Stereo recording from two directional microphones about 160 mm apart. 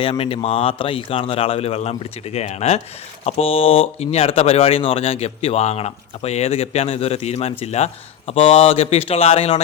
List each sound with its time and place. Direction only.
0.0 s speech: 35° left (ahead or behind)